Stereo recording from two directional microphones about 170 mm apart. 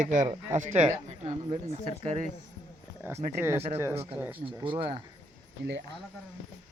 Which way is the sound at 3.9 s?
35° right (ahead or behind).